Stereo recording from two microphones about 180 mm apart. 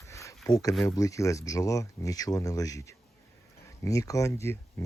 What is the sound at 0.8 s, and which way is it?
Speech, 20° left (ahead or behind).